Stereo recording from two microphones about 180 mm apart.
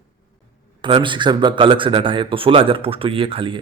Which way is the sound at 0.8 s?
30° right (ahead or behind).